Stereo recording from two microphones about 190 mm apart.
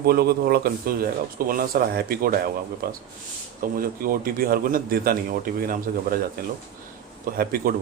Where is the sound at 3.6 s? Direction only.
50° right (ahead or behind).